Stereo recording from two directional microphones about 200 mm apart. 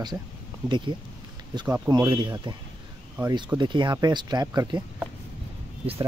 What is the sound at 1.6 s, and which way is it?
Speech, 15° right (ahead or behind).